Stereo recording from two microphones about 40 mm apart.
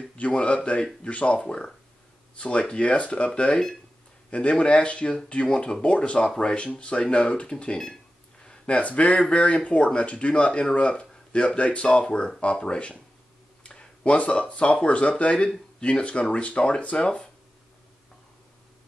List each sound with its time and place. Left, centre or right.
0.2 s speech: left
8.5 s speech: left
13.7 s a sound: left
14.1 s speech: left